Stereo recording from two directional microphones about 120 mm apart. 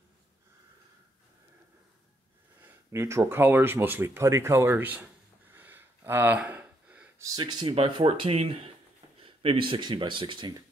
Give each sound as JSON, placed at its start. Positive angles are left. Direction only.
{"t": 2.9, "sound": "speech", "side_deg": -25}
{"t": 5.5, "sound": "a sound", "side_deg": -15}
{"t": 7.3, "sound": "speech", "side_deg": -40}
{"t": 7.7, "sound": "speech", "side_deg": -50}